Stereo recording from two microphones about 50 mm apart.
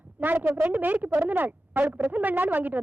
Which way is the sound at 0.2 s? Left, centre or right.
Right.